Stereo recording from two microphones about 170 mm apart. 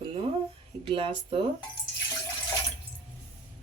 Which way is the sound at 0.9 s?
30° right (ahead or behind).